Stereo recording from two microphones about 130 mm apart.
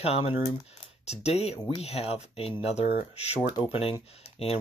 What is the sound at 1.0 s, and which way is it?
Speech, 55° left (ahead or behind).